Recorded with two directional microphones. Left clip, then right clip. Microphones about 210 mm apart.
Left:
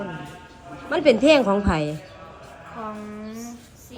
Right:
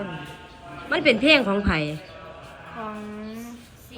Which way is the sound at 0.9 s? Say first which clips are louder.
Left 2 dB; 5° left (ahead or behind).